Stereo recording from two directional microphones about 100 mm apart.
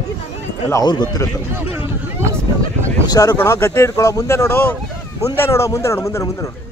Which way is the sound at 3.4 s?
25° left (ahead or behind).